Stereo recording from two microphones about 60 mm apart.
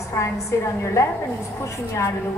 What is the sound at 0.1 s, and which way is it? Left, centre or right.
A woman's voice, left.